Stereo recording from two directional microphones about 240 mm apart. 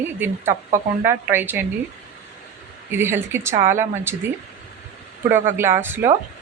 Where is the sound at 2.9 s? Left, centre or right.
Centre.